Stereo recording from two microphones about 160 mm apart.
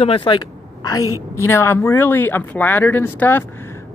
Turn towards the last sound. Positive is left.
turn(degrees=15)  # may be behind; listen again after turning